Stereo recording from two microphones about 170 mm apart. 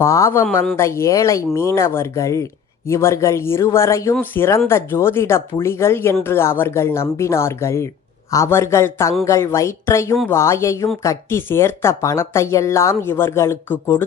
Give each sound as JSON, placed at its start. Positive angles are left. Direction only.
{"t": 0.0, "sound": "speech", "side_deg": 15}